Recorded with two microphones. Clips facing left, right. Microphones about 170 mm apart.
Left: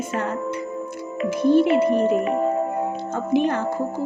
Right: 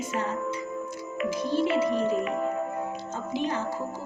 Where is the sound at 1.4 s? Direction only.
60° left (ahead or behind).